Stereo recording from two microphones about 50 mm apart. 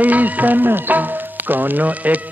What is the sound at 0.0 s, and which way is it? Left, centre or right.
Music, right.